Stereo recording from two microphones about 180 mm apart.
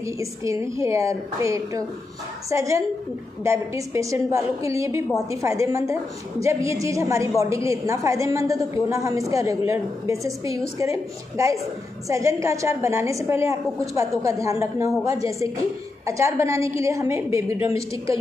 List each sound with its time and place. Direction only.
0.0 s a woman's voice: 15° right (ahead or behind)